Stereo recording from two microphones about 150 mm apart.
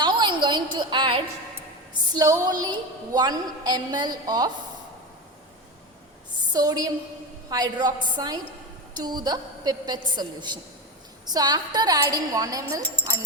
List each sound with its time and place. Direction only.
0.0 s a sound: 30° right (ahead or behind)
1.9 s a woman's voice: 25° right (ahead or behind)
6.5 s a woman's voice: 25° right (ahead or behind)